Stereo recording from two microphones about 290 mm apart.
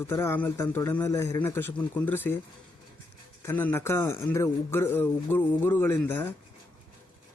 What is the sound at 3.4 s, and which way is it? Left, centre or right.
Speech, centre.